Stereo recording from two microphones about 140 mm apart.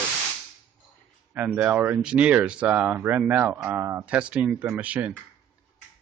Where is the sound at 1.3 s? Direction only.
10° right (ahead or behind).